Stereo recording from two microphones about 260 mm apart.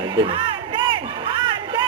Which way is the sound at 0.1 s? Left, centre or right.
Centre.